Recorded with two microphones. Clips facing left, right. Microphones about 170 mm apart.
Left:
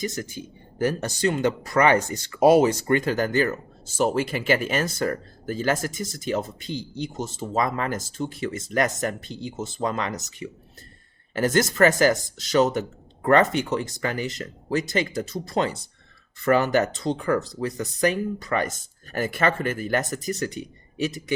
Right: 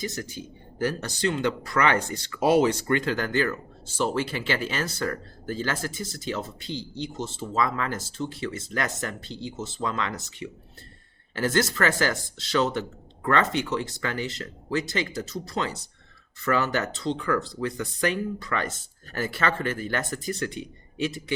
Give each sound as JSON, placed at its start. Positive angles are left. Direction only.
{"t": 0.0, "sound": "a man's voice", "side_deg": 50}